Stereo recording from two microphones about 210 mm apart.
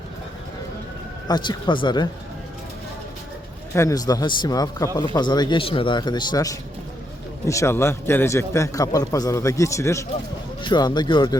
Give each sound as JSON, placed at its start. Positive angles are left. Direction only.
{"t": 1.3, "sound": "a man's voice", "side_deg": 20}
{"t": 3.8, "sound": "a man's voice", "side_deg": 15}